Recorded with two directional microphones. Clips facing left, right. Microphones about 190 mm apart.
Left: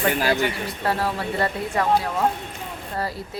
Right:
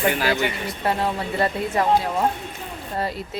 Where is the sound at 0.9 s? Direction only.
20° right (ahead or behind).